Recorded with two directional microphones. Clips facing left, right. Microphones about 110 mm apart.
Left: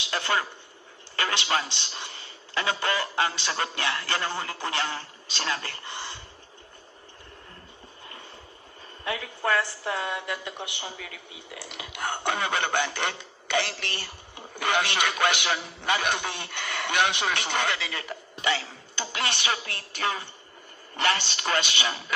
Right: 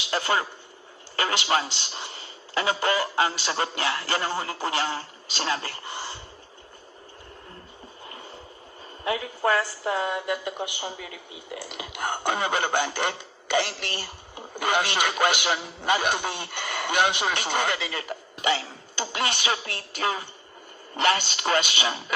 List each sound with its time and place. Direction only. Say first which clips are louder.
0.1 s a man's voice: right 2 dB; 30° right (ahead or behind)
9.0 s a woman's voice: right 3 dB; 25° right (ahead or behind)
17.7 s a woman's voice: right 2 dB; 30° right (ahead or behind)